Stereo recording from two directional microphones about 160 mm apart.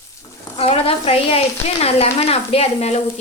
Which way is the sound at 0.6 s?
35° left (ahead or behind).